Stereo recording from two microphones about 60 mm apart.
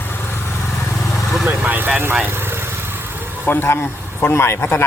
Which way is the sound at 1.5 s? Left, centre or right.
Right.